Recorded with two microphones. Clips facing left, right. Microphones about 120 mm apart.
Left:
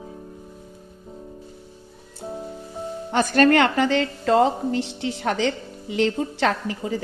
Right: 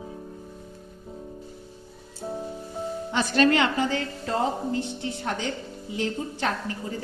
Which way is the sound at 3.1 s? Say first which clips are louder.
Left 5 dB; 50° left (ahead or behind).